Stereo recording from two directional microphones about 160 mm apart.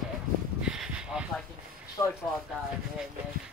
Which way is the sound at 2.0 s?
20° left (ahead or behind).